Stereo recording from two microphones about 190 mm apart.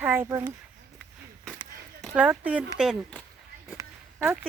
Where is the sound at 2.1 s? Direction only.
5° right (ahead or behind).